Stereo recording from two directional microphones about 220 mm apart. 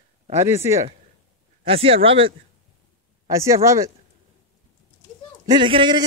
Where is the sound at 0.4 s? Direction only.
10° right (ahead or behind).